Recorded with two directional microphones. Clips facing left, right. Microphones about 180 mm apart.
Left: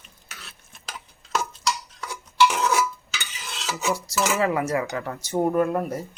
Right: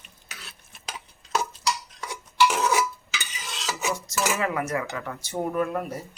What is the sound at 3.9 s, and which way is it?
Speech, 30° left (ahead or behind).